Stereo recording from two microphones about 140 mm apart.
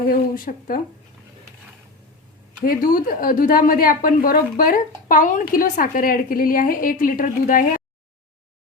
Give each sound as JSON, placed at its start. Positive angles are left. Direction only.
{"t": 0.1, "sound": "a woman's voice", "side_deg": 90}
{"t": 2.6, "sound": "a woman's voice", "side_deg": 90}